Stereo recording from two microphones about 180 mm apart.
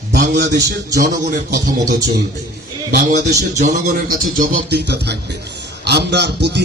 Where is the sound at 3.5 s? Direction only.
45° right (ahead or behind).